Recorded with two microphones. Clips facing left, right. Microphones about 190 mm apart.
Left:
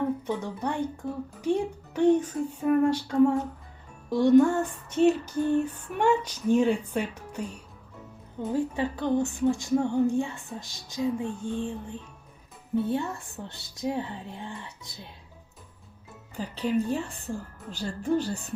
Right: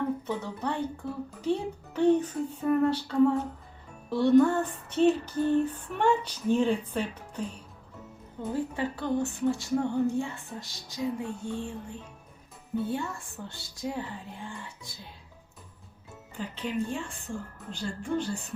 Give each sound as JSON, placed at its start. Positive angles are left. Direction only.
{"t": 0.3, "sound": "a woman's voice", "side_deg": 15}
{"t": 16.4, "sound": "a woman's voice", "side_deg": 40}